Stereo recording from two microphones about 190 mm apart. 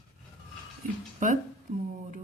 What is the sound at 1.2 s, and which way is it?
Speech, 45° right (ahead or behind).